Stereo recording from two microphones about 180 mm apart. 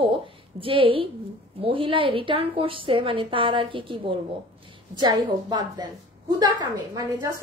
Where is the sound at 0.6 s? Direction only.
30° right (ahead or behind).